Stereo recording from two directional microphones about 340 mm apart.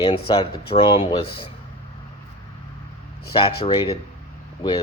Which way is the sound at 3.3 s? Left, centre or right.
Centre.